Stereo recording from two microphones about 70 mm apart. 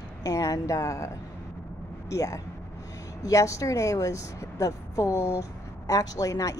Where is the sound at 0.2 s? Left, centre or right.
Left.